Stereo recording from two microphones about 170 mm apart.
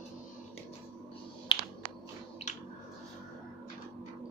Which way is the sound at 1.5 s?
30° left (ahead or behind).